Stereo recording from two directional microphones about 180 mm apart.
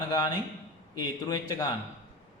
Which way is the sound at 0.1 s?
20° left (ahead or behind).